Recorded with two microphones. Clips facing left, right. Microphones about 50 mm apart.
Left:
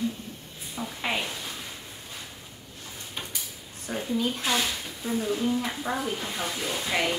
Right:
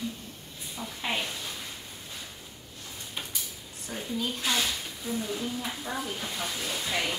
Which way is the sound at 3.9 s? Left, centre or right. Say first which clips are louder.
Left 5 dB; left.